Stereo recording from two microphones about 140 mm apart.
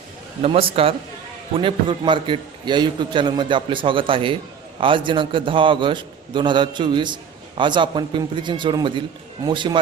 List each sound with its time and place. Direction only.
0.4 s a man's voice: 40° right (ahead or behind)